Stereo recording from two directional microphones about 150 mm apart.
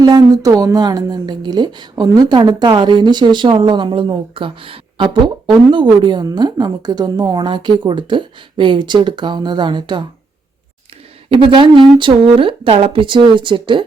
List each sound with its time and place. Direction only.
0.0 s speech: 25° right (ahead or behind)
11.3 s a woman's voice: 35° right (ahead or behind)